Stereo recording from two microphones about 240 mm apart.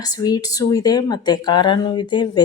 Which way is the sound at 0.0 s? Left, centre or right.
Centre.